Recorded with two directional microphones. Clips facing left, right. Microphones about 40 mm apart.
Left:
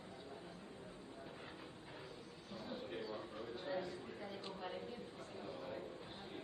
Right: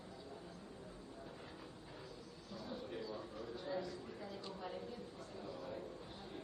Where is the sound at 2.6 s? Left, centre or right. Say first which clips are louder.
Even; left.